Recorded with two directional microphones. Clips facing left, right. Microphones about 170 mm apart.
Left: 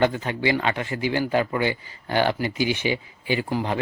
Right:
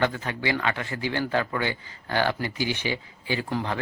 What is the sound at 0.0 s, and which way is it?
A man's voice, 20° left (ahead or behind).